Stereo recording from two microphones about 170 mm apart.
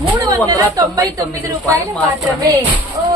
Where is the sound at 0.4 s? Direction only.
20° right (ahead or behind).